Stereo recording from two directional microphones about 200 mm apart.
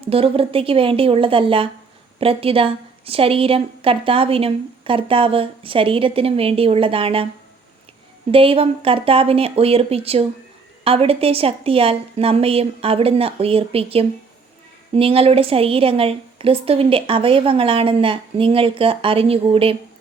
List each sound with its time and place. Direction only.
0.0 s a woman's voice: 30° right (ahead or behind)
8.3 s a woman's voice: 25° right (ahead or behind)